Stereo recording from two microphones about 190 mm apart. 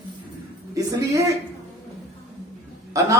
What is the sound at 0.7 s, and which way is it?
Speech, 15° right (ahead or behind).